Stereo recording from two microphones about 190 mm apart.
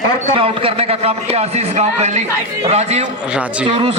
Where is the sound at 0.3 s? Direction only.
30° right (ahead or behind).